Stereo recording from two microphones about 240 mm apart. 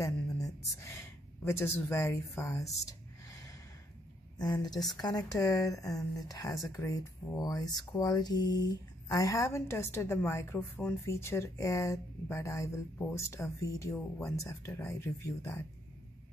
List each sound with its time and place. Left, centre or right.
1.4 s speech: centre